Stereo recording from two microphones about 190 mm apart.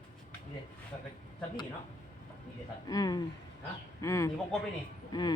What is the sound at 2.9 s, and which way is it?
Speech, 20° left (ahead or behind).